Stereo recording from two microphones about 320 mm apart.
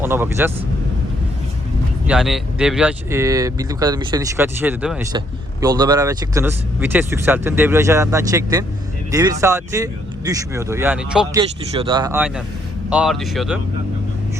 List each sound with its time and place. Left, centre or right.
0.0 s speech: centre
2.0 s speech: centre
11.7 s speech: centre